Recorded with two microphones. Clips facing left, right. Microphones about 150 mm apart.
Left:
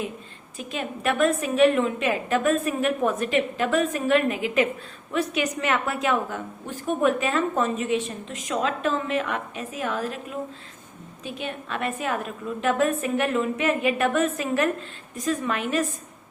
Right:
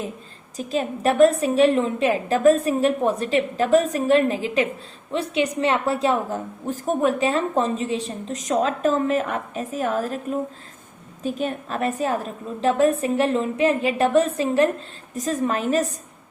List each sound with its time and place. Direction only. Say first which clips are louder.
0.5 s a woman's voice: right 6 dB; 35° right (ahead or behind)